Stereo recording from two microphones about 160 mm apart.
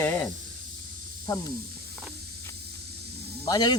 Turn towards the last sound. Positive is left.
turn(degrees=25)  # may be behind; listen again after turning